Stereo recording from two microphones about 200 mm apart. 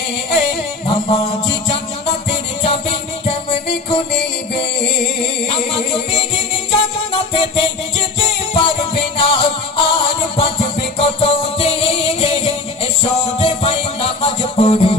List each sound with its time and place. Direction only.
0.9 s music: 30° left (ahead or behind)
5.5 s music: 25° left (ahead or behind)